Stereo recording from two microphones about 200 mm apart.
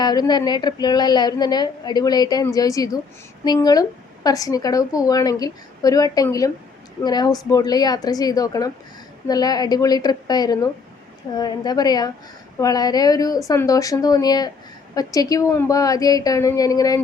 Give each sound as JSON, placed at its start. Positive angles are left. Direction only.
{"t": 0.0, "sound": "a woman's voice", "side_deg": 20}